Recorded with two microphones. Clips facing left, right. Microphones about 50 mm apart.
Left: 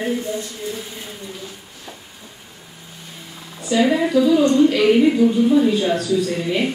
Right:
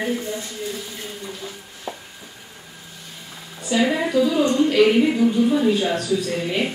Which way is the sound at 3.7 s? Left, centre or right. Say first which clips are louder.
Left 3 dB; centre.